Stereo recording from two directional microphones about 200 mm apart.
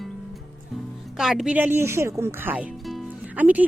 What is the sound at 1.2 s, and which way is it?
Speech, centre (ahead or behind).